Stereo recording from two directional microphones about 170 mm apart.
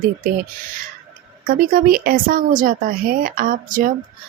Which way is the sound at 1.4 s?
55° right (ahead or behind).